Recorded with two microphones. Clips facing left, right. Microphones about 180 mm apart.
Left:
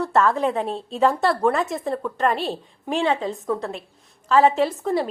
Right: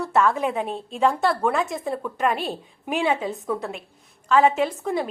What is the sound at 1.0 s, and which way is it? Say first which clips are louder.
A woman's voice: left 2 dB; centre (ahead or behind).